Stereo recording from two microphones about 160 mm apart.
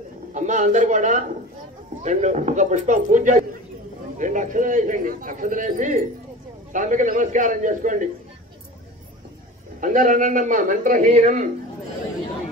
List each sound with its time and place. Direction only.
0.3 s a man's voice: 50° right (ahead or behind)
9.8 s a man's voice: 55° right (ahead or behind)